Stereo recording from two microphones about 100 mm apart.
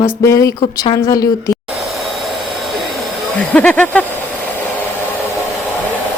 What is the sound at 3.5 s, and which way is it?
Speech, 15° left (ahead or behind).